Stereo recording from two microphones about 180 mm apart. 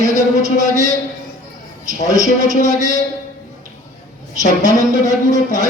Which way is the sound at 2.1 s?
20° left (ahead or behind).